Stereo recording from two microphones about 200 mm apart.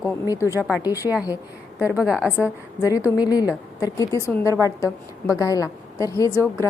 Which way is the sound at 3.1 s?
20° left (ahead or behind).